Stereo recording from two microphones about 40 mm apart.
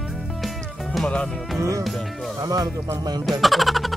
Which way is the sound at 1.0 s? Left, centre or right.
Left.